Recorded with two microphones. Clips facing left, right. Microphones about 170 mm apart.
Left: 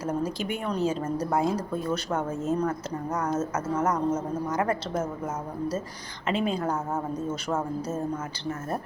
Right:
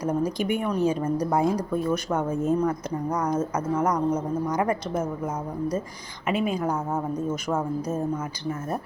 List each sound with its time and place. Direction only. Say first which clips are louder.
0.0 s speech: right 4 dB; 15° right (ahead or behind)
6.2 s speech: right 2 dB; 10° right (ahead or behind)